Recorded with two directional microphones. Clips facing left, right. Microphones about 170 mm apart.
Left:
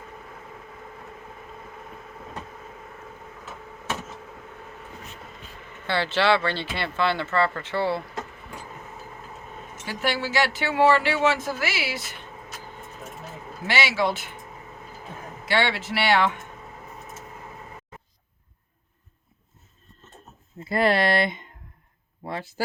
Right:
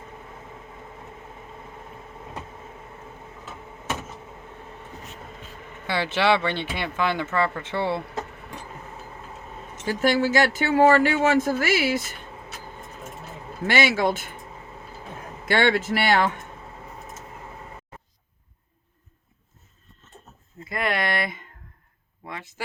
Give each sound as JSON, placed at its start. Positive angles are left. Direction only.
{"t": 5.8, "sound": "speech", "side_deg": -15}
{"t": 9.8, "sound": "speech", "side_deg": -45}
{"t": 13.7, "sound": "speech", "side_deg": -50}
{"t": 15.4, "sound": "speech", "side_deg": -50}
{"t": 20.7, "sound": "a sound", "side_deg": 30}